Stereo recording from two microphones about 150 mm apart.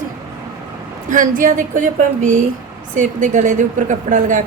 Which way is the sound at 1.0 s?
60° right (ahead or behind).